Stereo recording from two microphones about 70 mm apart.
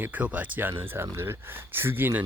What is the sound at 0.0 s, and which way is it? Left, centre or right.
Speech, right.